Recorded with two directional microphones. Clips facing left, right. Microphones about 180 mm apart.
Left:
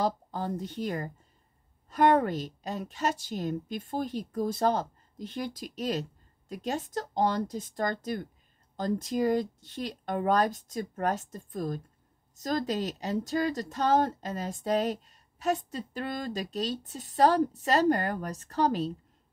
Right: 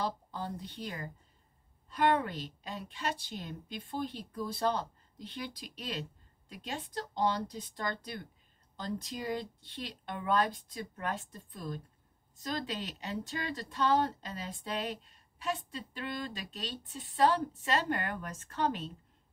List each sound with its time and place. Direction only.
0.0 s a woman's voice: 45° left (ahead or behind)